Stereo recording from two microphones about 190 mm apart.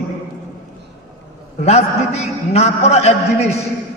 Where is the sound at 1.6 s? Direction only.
35° left (ahead or behind).